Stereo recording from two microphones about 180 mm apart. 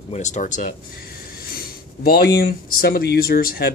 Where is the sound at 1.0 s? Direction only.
55° left (ahead or behind).